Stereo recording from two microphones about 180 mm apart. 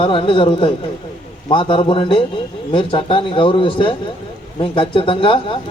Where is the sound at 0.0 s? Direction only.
30° left (ahead or behind).